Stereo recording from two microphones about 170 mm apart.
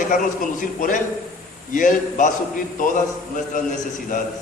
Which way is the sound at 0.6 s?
50° left (ahead or behind).